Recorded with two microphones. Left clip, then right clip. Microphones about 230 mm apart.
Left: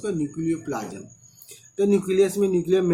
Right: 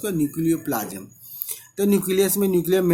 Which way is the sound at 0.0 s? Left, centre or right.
Right.